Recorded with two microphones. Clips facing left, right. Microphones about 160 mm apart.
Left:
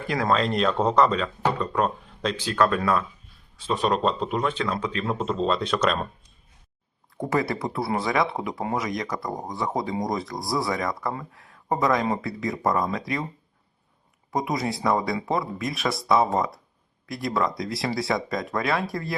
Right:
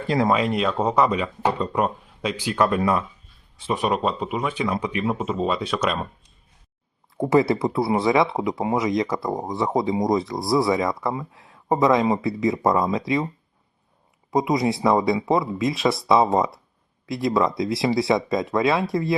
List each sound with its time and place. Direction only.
0.3 s speech: 10° right (ahead or behind)
7.2 s speech: 25° right (ahead or behind)
14.3 s speech: 20° right (ahead or behind)